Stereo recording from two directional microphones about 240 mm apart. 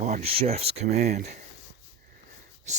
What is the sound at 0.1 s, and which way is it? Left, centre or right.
Speech, right.